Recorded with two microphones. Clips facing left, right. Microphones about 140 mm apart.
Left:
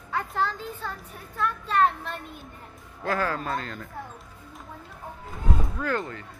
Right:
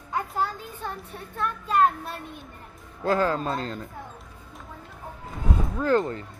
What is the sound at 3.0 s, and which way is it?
Speech, 25° right (ahead or behind).